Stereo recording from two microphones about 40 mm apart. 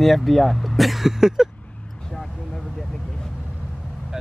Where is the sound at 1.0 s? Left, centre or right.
Centre.